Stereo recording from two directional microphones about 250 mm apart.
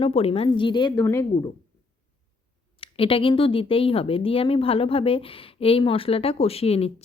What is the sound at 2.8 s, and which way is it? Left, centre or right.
A woman's voice, left.